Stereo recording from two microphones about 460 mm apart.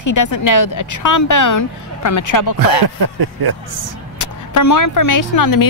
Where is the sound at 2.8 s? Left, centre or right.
Right.